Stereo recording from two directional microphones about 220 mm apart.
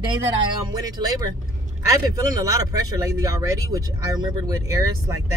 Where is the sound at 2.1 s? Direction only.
15° right (ahead or behind).